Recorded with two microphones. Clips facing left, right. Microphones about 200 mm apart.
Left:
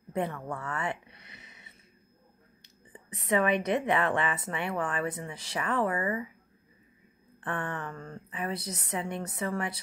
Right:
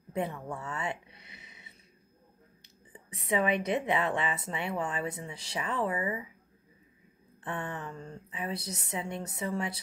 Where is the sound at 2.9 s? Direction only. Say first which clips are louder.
Left 2 dB; 10° right (ahead or behind).